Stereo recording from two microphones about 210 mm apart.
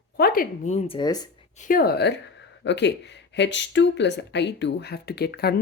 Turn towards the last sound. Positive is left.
turn(degrees=50)  # may be behind; listen again after turning